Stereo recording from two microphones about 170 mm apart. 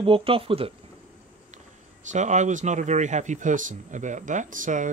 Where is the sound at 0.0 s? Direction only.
30° right (ahead or behind).